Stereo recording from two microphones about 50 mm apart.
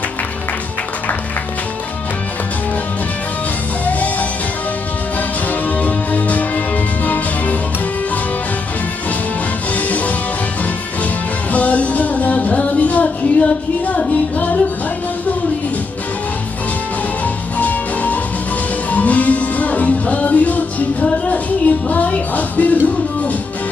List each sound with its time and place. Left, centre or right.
3.8 s music: left
5.5 s music: left
9.8 s music: left
11.5 s music: left
17.6 s music: left